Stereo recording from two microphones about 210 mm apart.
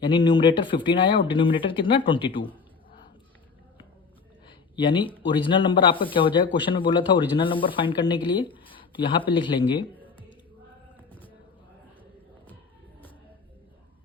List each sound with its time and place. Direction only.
0.0 s speech: 20° left (ahead or behind)
4.4 s a sound: 20° left (ahead or behind)
5.2 s speech: 25° left (ahead or behind)